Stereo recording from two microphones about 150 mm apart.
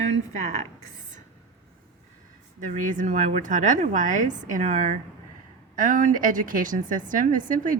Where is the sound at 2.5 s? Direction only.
55° right (ahead or behind).